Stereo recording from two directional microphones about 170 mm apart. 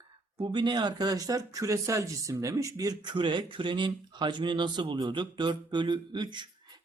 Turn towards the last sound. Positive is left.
turn(degrees=-25)  # may be behind; listen again after turning